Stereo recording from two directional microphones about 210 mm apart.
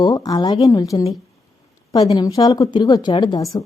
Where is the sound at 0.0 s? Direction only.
20° left (ahead or behind).